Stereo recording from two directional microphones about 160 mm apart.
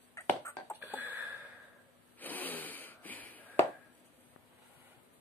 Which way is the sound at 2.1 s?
10° left (ahead or behind).